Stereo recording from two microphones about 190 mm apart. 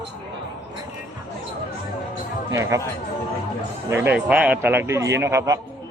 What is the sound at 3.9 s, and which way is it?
A man's voice, 10° right (ahead or behind).